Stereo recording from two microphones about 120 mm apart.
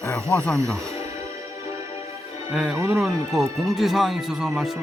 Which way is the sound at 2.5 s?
5° right (ahead or behind).